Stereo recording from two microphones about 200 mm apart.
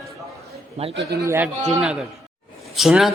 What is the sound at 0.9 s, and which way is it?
Speech, 60° right (ahead or behind).